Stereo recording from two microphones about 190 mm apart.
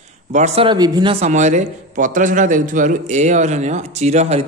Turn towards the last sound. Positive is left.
turn(degrees=-35)  # may be behind; listen again after turning